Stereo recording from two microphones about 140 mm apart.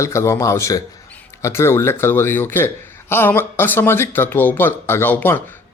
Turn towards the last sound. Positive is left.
turn(degrees=15)  # may be behind; listen again after turning